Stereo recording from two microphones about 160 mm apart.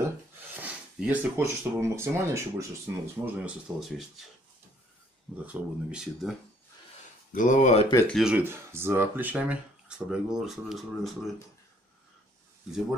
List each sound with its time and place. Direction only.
0.0 s a sound: 10° right (ahead or behind)
2.9 s speech: 15° right (ahead or behind)
5.4 s speech: 5° right (ahead or behind)
7.3 s speech: 50° left (ahead or behind)
8.1 s speech: 5° right (ahead or behind)
8.5 s speech: 15° right (ahead or behind)